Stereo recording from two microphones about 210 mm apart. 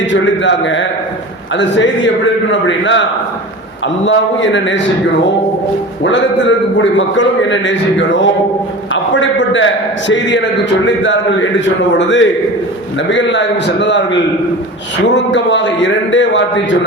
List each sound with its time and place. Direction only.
0.1 s a man's voice: 60° left (ahead or behind)
6.0 s a man's voice: 60° left (ahead or behind)